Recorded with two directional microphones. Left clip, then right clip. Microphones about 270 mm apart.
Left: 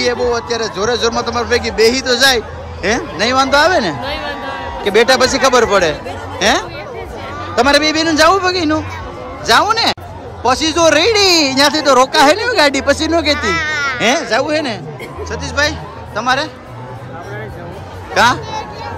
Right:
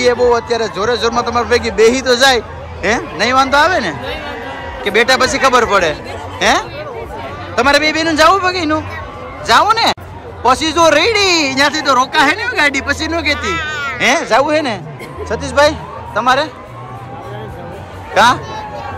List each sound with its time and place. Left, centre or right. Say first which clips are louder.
0.0 s a man's voice: right 4 dB; centre
13.6 s a sound: left 3 dB; left
13.9 s a man's voice: right 5 dB; centre
18.1 s speech: right 2 dB; centre